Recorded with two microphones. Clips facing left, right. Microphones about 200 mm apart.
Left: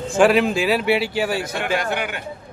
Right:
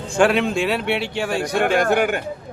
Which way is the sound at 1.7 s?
50° right (ahead or behind).